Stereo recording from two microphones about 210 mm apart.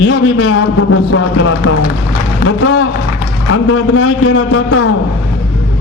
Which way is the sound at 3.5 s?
80° left.